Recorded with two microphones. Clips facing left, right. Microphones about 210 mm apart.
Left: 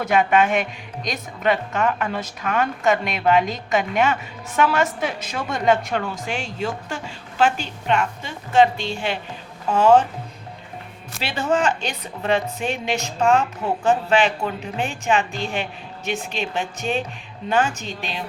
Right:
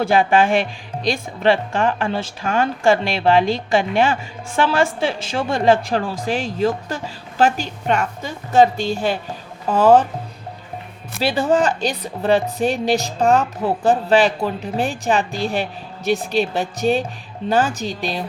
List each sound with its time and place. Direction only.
0.0 s speech: 30° right (ahead or behind)
11.2 s speech: 35° right (ahead or behind)